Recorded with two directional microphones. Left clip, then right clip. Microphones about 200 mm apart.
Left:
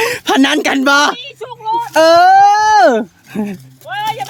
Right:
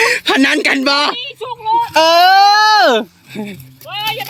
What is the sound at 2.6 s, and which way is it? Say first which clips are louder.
Speech: left 1 dB; 35° left (ahead or behind).